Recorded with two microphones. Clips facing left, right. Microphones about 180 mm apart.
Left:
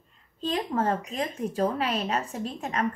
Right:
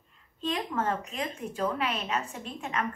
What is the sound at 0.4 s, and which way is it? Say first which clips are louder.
Speech: left 3 dB; 35° left (ahead or behind).